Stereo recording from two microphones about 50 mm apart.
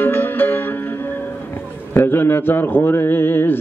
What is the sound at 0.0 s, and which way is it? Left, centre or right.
Music, left.